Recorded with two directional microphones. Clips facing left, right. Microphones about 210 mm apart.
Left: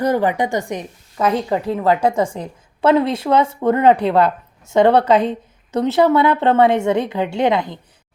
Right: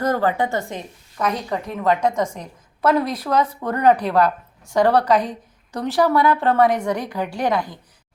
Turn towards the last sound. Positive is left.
turn(degrees=25)  # may be behind; listen again after turning